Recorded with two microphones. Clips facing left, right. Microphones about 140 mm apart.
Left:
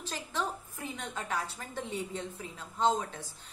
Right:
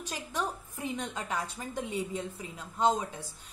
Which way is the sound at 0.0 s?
15° right (ahead or behind).